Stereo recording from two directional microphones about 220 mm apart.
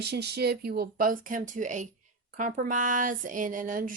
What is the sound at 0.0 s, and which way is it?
A woman's voice, 50° right (ahead or behind).